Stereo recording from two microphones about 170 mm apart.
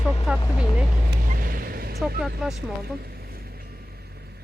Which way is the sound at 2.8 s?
65° right (ahead or behind).